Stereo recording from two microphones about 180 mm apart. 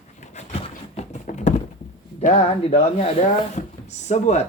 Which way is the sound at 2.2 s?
35° left (ahead or behind).